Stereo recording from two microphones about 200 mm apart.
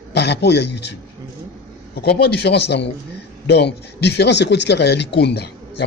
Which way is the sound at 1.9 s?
55° left (ahead or behind).